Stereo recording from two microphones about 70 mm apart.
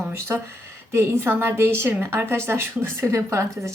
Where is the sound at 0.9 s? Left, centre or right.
Right.